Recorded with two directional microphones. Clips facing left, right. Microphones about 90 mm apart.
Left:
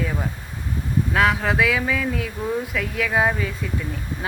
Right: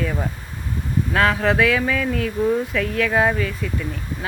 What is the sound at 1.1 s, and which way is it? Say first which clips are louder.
Speech: right 2 dB; 5° left (ahead or behind).